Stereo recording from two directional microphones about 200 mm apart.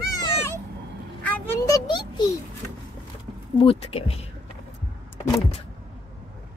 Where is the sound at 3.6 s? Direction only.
30° left (ahead or behind).